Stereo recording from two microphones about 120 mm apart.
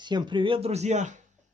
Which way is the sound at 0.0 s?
40° right (ahead or behind).